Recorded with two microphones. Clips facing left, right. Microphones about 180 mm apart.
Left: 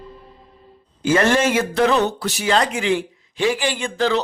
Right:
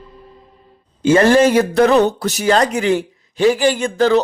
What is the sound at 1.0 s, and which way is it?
Speech, 35° right (ahead or behind).